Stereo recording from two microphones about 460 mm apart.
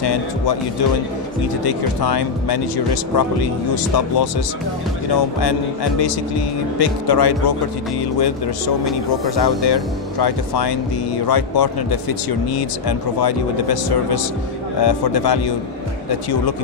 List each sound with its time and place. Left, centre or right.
0.0 s speech: left
1.6 s speech: left
9.4 s speech: left
12.8 s speech: left